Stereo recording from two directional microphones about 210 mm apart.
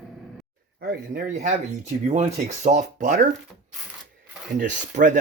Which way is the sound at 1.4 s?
35° right (ahead or behind).